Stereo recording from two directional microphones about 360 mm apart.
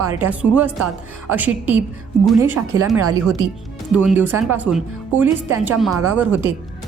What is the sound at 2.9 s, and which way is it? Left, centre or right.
Speech, right.